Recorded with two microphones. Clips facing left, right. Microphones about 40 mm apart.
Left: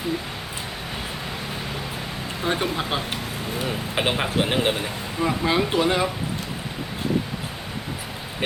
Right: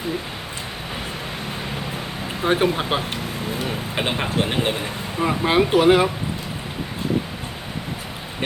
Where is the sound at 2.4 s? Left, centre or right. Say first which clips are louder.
Right 5 dB; right.